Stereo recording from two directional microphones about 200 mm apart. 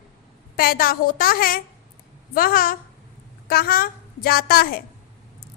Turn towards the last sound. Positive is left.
turn(degrees=50)  # may be behind; listen again after turning